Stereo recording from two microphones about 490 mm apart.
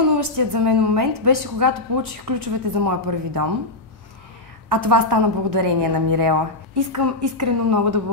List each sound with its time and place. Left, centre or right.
0.2 s a woman's voice: right
4.6 s a woman's voice: right